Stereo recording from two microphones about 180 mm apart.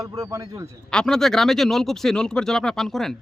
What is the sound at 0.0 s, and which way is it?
Speech, 20° right (ahead or behind).